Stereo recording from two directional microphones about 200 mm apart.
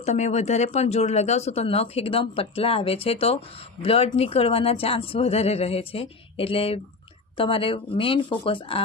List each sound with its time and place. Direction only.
0.0 s speech: 35° left (ahead or behind)